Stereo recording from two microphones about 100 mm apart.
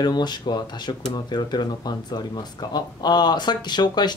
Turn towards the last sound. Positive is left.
turn(degrees=45)  # may be behind; listen again after turning